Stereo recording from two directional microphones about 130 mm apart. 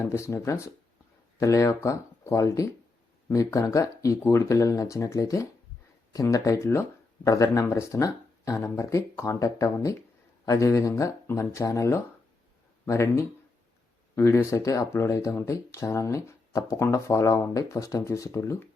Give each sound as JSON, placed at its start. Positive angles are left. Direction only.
{"t": 0.0, "sound": "speech", "side_deg": 20}